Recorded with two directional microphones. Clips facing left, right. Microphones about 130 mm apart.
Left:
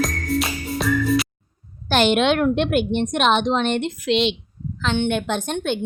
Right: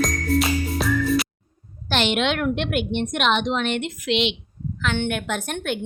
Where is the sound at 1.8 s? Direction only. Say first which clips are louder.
Left 5 dB; 45° left (ahead or behind).